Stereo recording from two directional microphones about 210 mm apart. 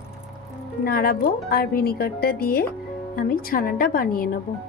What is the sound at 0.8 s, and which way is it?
A woman's voice, 45° left (ahead or behind).